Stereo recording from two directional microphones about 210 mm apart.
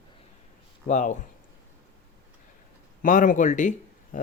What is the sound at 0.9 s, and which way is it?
Speech, 35° left (ahead or behind).